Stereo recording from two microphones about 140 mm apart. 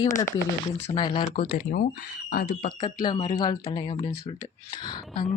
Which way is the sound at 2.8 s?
30° left (ahead or behind).